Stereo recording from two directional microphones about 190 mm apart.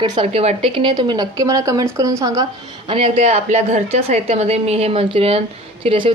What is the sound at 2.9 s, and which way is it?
A woman's voice, 30° right (ahead or behind).